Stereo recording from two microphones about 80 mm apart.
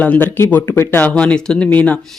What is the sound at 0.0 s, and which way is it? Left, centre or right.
Speech, left.